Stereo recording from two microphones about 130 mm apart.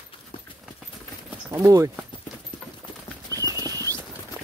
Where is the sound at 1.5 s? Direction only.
25° right (ahead or behind).